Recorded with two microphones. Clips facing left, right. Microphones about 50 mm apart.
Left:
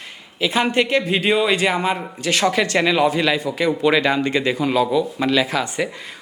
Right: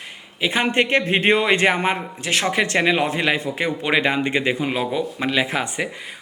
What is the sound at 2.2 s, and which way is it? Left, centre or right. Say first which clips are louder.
Speech: left 2 dB; right.